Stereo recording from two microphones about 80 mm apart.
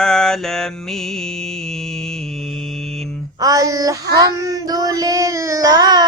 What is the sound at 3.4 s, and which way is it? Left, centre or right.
Child singing, right.